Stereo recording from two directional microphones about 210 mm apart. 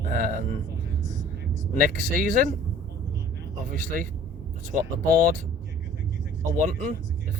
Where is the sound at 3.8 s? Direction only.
40° right (ahead or behind).